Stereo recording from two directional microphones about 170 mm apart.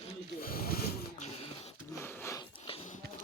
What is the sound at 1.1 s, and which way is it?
Beatboxing, 40° left (ahead or behind).